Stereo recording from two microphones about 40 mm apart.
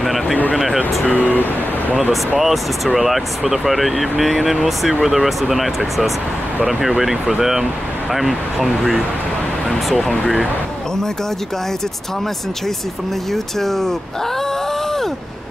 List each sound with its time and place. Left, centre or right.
0.0 s a sound: centre
1.3 s vehicle: left
2.3 s speech: centre
9.7 s speech: centre
13.3 s speech: centre